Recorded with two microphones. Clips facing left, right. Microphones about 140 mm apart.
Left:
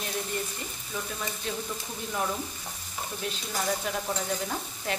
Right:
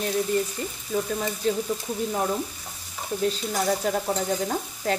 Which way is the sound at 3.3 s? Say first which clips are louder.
Right 6 dB; 40° right (ahead or behind).